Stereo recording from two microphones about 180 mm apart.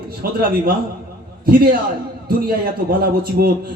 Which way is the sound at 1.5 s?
55° right (ahead or behind).